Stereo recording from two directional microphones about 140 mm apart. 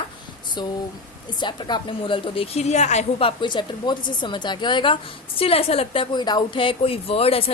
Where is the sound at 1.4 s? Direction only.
30° left (ahead or behind).